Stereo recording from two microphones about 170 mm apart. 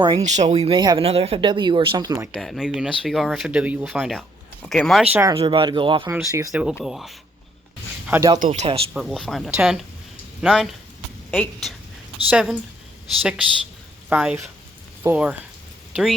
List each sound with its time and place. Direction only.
0.2 s speech: 45° right (ahead or behind); by 2.3 s 20° right (ahead or behind)
2.3 s speech: centre (ahead or behind)
5.1 s speech: 15° right (ahead or behind)
5.4 s speech: 30° right (ahead or behind)
6.1 s speech: 15° right (ahead or behind)
6.5 s speech: 5° right (ahead or behind)
8.4 s speech: 50° right (ahead or behind)
8.9 s a woman's voice: centre (ahead or behind)
12.3 s speech: 5° right (ahead or behind)
14.1 s speech: 10° right (ahead or behind)